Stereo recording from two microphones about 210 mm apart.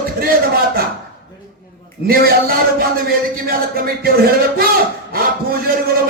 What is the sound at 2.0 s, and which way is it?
A man's voice, 45° right (ahead or behind).